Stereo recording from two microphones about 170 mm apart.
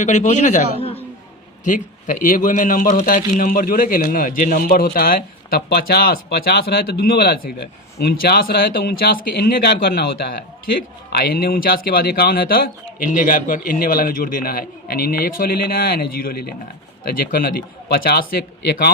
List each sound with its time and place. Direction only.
0.0 s a man's voice: 45° left (ahead or behind)
1.6 s a man's voice: 50° left (ahead or behind); by 18.9 s 70° left (ahead or behind)